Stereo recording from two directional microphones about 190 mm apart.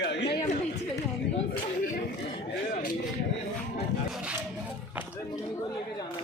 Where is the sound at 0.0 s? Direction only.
65° left (ahead or behind).